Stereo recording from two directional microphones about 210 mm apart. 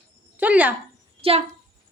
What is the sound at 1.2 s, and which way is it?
Speech, 25° right (ahead or behind).